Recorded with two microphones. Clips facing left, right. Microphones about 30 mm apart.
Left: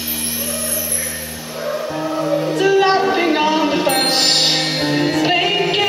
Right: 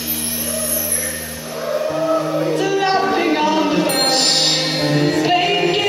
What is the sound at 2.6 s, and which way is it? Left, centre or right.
Music, centre.